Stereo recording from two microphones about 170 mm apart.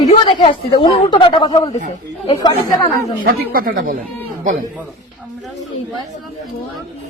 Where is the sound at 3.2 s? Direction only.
60° right (ahead or behind).